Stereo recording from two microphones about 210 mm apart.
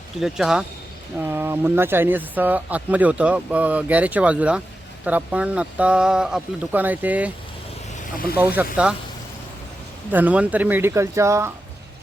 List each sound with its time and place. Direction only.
0.2 s speech: centre (ahead or behind)
8.4 s speech: 10° right (ahead or behind)
10.1 s speech: 10° right (ahead or behind)